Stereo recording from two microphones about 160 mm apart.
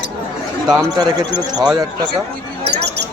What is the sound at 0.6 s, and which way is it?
Speech, 25° right (ahead or behind).